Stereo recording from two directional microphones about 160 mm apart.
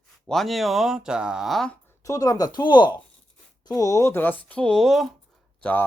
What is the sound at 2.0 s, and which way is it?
Speech, 20° left (ahead or behind).